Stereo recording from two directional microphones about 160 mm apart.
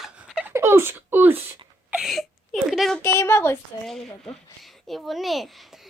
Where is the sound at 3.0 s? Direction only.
15° left (ahead or behind).